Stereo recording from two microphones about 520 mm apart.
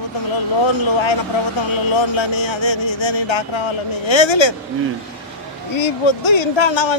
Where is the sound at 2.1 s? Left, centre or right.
Left.